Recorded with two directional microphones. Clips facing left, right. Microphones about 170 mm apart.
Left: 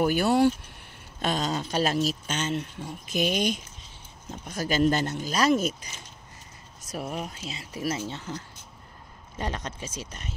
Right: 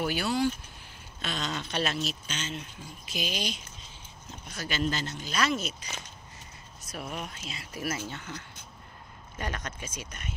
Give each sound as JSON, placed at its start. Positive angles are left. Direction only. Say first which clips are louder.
{"t": 0.0, "sound": "speech", "louder": "left 7 dB", "side_deg": 45}
{"t": 1.2, "sound": "speech", "louder": "left 7 dB", "side_deg": 40}
{"t": 5.3, "sound": "speech", "louder": "left 6 dB", "side_deg": 45}
{"t": 6.9, "sound": "speech", "louder": "left 4 dB", "side_deg": 35}